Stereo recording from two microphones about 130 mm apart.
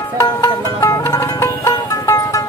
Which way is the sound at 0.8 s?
20° left (ahead or behind).